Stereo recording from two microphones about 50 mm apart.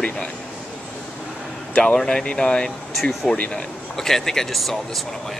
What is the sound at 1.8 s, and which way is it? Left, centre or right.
Speech, centre.